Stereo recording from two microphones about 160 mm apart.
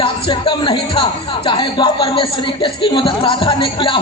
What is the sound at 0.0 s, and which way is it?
A man's voice, 30° left (ahead or behind).